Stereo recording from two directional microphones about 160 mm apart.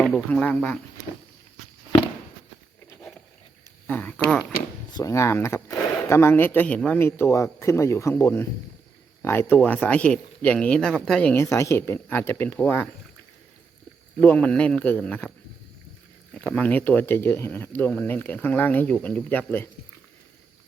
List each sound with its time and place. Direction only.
0.0 s speech: 5° left (ahead or behind)
3.8 s speech: 10° left (ahead or behind)
4.9 s speech: 20° left (ahead or behind)
14.2 s speech: 10° left (ahead or behind)
16.3 s speech: 5° left (ahead or behind)